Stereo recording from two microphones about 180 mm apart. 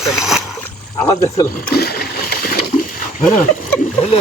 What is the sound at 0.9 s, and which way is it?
Speech, 20° left (ahead or behind).